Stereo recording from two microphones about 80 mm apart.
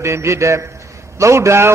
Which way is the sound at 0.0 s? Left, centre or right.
Right.